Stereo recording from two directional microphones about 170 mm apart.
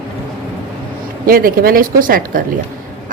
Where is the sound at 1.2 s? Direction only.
55° right (ahead or behind).